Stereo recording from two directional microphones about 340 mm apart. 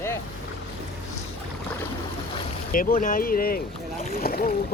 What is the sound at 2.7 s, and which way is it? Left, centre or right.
Speech, left.